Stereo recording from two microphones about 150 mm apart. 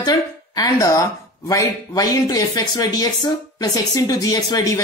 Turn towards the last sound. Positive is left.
turn(degrees=25)  # may be behind; listen again after turning